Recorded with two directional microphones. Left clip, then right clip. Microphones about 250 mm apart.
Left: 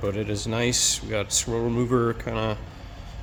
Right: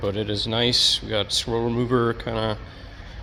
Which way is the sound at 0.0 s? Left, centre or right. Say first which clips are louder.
Right 3 dB; centre.